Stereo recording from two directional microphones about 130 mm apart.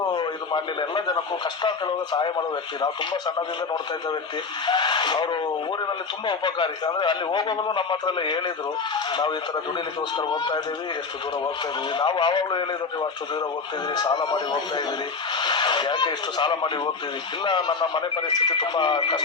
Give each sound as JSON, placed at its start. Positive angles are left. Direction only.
{"t": 0.1, "sound": "a man's voice", "side_deg": 35}
{"t": 2.8, "sound": "speech", "side_deg": 35}
{"t": 4.6, "sound": "speech", "side_deg": 35}
{"t": 10.2, "sound": "speech", "side_deg": 35}
{"t": 11.9, "sound": "speech", "side_deg": 35}
{"t": 13.9, "sound": "speech", "side_deg": 35}